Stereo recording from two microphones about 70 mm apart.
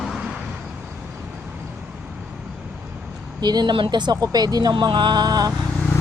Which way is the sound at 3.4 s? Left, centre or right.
Right.